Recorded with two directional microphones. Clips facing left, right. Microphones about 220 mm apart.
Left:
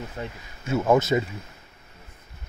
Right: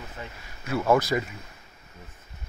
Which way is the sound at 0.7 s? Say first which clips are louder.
Left 2 dB; 20° left (ahead or behind).